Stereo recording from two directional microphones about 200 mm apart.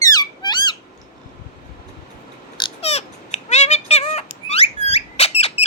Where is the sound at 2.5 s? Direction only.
25° left (ahead or behind).